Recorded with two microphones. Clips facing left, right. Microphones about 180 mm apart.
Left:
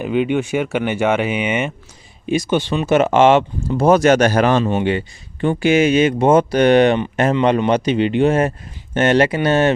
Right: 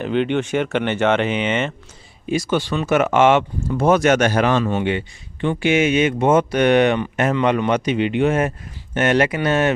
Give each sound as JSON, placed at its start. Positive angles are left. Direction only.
{"t": 0.0, "sound": "speech", "side_deg": 10}
{"t": 4.6, "sound": "speech", "side_deg": 25}
{"t": 4.9, "sound": "speech", "side_deg": 40}